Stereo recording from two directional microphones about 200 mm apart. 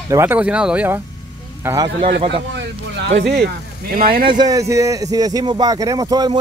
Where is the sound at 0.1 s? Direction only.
10° right (ahead or behind).